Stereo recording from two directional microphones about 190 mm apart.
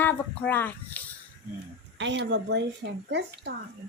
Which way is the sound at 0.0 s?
10° left (ahead or behind).